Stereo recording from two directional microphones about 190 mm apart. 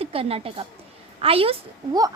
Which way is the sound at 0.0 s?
30° right (ahead or behind).